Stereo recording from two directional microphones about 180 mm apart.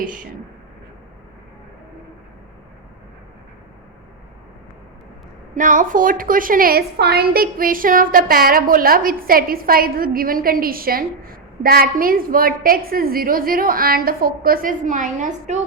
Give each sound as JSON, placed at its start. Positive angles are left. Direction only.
{"t": 5.5, "sound": "a woman's voice", "side_deg": -45}